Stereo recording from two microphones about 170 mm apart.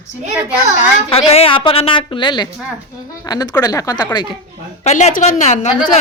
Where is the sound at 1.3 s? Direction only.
35° left (ahead or behind).